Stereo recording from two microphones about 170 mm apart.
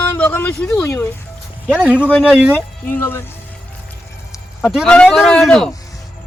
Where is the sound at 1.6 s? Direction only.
5° right (ahead or behind).